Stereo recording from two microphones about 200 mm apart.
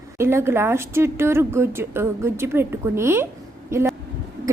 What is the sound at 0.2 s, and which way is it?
A woman's voice, 10° right (ahead or behind).